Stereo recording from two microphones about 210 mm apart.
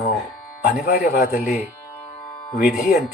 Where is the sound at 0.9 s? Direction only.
45° left (ahead or behind).